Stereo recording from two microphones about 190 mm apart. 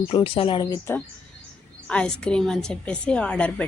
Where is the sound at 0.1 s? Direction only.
30° left (ahead or behind).